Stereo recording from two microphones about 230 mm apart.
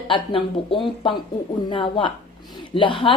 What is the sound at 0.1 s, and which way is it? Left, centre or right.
A woman's voice, left.